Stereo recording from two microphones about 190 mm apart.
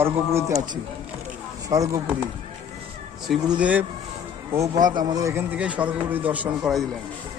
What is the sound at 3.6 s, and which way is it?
Speech, 5° right (ahead or behind).